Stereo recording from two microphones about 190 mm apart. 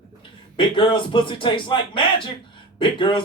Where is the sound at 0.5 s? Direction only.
25° left (ahead or behind).